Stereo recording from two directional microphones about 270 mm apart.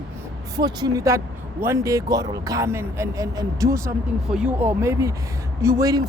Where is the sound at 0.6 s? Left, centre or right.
Centre.